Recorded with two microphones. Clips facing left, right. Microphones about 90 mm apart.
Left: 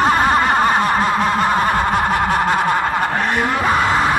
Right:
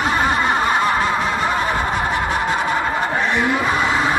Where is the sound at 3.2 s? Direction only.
50° left (ahead or behind).